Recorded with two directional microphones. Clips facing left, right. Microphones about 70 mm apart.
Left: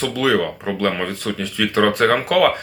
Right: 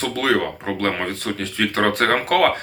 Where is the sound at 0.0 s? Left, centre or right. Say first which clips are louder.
Left 2 dB; right.